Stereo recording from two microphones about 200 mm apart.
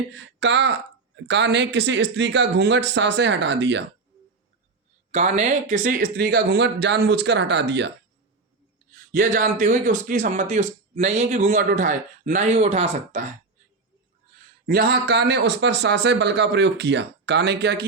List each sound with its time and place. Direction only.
0.1 s a man's voice: 60° right (ahead or behind)
5.1 s a man's voice: 35° right (ahead or behind); by 7.9 s 60° right (ahead or behind)
9.1 s speech: 45° right (ahead or behind)
14.7 s a man's voice: 50° right (ahead or behind)